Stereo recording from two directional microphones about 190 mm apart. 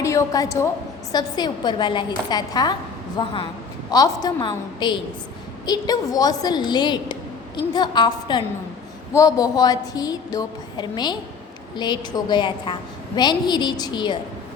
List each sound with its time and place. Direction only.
0.0 s a woman's voice: 15° left (ahead or behind)